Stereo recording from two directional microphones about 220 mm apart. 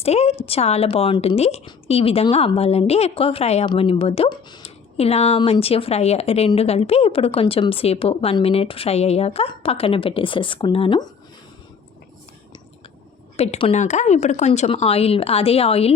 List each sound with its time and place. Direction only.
0.0 s a woman's voice: 30° left (ahead or behind)
13.3 s a woman's voice: 30° left (ahead or behind)